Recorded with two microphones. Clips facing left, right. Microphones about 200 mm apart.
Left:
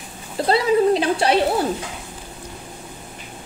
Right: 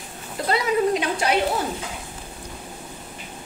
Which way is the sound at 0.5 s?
30° left (ahead or behind).